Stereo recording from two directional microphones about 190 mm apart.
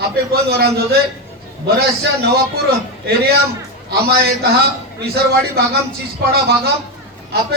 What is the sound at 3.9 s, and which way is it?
A woman's voice, 55° right (ahead or behind).